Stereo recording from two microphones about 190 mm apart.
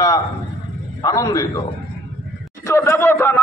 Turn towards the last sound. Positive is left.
turn(degrees=15)  # may be behind; listen again after turning